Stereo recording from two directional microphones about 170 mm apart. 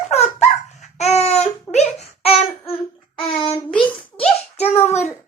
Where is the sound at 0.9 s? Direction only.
40° left (ahead or behind).